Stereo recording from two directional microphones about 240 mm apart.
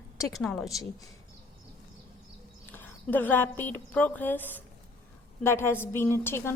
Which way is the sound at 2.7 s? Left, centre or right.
Centre.